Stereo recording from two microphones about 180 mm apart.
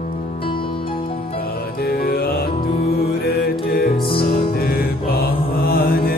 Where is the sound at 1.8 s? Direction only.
55° left (ahead or behind).